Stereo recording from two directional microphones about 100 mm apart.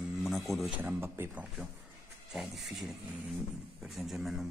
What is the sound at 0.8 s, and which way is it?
Speech, 25° right (ahead or behind).